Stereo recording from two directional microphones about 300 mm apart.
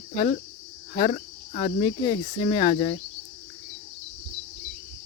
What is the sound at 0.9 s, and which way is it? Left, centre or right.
Speech, centre.